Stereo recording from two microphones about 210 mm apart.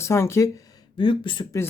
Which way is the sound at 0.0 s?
15° left (ahead or behind).